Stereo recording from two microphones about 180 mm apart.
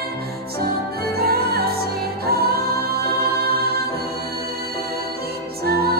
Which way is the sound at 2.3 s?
60° right (ahead or behind).